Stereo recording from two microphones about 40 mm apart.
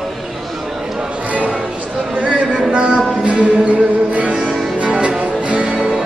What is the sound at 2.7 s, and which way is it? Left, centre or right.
Music, right.